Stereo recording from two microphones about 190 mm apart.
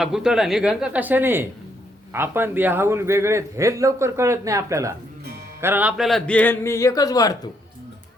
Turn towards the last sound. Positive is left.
turn(degrees=20)  # may be behind; listen again after turning